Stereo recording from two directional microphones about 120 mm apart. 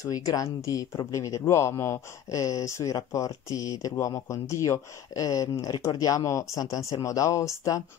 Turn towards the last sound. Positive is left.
turn(degrees=25)  # may be behind; listen again after turning